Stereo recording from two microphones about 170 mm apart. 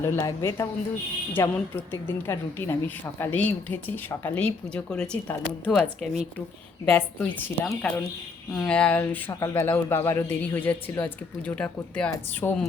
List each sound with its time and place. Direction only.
0.0 s a woman's voice: 15° left (ahead or behind)